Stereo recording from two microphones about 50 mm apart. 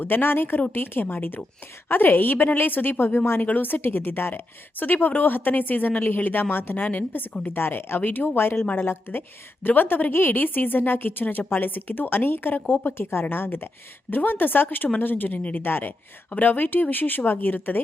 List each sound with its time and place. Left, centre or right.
0.0 s a woman's voice: left